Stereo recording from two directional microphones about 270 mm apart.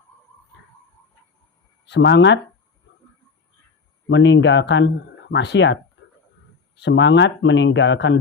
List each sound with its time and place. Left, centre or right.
1.9 s speech: left
4.1 s speech: left